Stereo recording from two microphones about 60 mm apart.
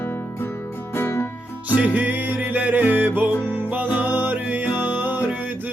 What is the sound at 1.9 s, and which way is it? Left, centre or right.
Music, right.